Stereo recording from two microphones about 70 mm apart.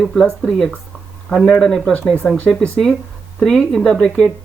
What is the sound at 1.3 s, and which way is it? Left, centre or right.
Speech, centre.